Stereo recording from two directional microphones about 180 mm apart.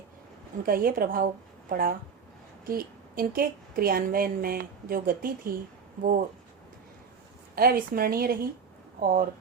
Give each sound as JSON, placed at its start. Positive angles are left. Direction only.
{"t": 0.6, "sound": "a woman's voice", "side_deg": -55}
{"t": 7.5, "sound": "a woman's voice", "side_deg": -55}